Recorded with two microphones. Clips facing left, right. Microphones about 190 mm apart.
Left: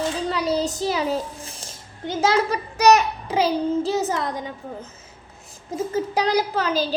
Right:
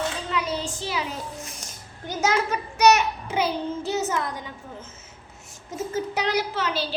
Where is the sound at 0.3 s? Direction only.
35° left (ahead or behind).